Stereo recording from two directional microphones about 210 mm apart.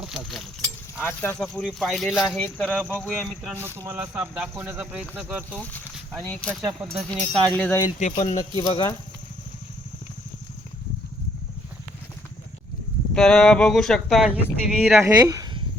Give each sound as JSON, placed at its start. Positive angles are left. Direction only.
{"t": 0.0, "sound": "speech", "side_deg": 0}
{"t": 3.5, "sound": "speech", "side_deg": -10}
{"t": 5.5, "sound": "speech", "side_deg": 5}
{"t": 8.1, "sound": "speech", "side_deg": 30}
{"t": 13.1, "sound": "speech", "side_deg": 5}
{"t": 15.3, "sound": "a sound", "side_deg": -15}